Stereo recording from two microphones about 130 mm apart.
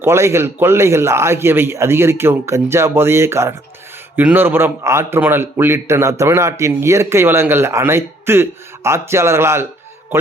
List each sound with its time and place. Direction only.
0.0 s a man's voice: 20° right (ahead or behind)